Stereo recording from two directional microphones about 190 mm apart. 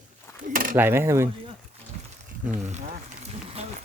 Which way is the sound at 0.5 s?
45° right (ahead or behind).